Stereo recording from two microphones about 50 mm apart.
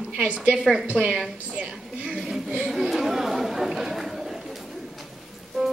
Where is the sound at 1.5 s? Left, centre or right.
Right.